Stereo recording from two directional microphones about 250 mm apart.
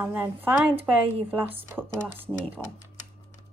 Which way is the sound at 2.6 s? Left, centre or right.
Centre.